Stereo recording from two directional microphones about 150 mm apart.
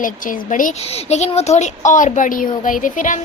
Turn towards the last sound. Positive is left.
turn(degrees=60)  # may be behind; listen again after turning